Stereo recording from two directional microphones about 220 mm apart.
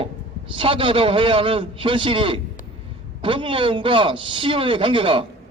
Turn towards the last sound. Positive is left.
turn(degrees=-25)  # may be behind; listen again after turning